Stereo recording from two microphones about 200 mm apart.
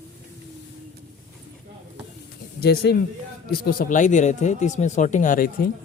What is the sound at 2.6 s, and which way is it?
Speech, 55° left (ahead or behind).